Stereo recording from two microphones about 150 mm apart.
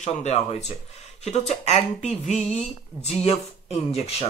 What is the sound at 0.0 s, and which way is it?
Speech, 45° left (ahead or behind).